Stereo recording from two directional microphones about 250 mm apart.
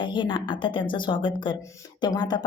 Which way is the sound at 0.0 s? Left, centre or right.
Centre.